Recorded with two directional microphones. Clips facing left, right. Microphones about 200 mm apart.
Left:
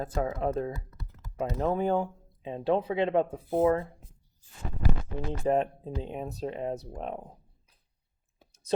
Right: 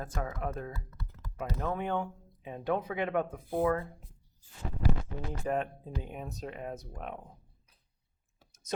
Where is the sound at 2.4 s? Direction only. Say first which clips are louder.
Left 5 dB; 25° left (ahead or behind).